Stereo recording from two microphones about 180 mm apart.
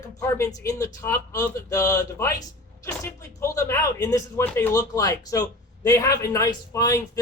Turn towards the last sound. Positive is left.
turn(degrees=20)  # may be behind; listen again after turning